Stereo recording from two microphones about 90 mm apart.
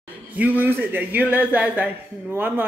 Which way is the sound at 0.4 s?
20° right (ahead or behind).